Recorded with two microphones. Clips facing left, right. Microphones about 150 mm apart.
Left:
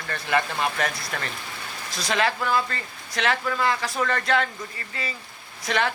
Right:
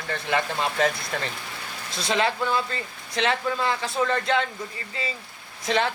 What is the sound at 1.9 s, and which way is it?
Speech, 25° right (ahead or behind).